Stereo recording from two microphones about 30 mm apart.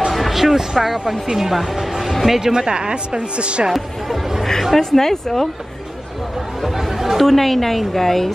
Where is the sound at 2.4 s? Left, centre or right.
Centre.